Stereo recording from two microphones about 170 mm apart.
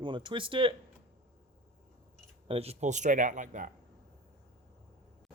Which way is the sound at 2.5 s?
35° right (ahead or behind).